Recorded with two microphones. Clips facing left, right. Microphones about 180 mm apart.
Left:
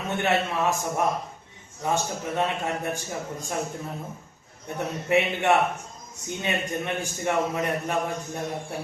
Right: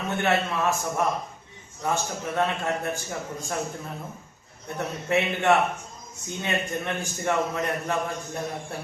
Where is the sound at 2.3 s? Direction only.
15° left (ahead or behind).